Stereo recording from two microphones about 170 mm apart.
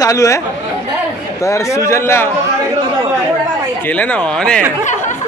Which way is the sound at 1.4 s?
20° left (ahead or behind).